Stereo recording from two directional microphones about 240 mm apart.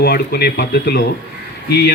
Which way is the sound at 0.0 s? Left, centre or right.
Left.